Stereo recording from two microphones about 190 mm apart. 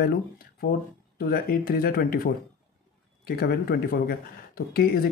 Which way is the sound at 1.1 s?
50° left (ahead or behind).